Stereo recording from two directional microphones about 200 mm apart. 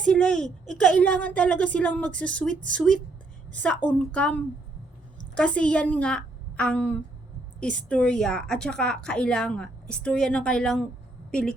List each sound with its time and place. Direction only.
0.0 s a woman's voice: 5° left (ahead or behind)